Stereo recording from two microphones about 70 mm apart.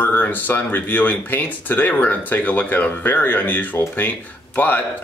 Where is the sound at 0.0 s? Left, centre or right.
Left.